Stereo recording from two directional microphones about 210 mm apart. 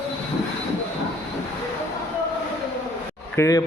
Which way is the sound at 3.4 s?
15° left (ahead or behind).